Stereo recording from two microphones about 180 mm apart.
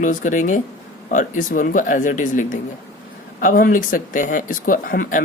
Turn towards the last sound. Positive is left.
turn(degrees=50)  # may be behind; listen again after turning